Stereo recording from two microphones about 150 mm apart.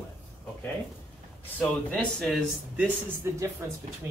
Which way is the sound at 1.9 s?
5° left (ahead or behind).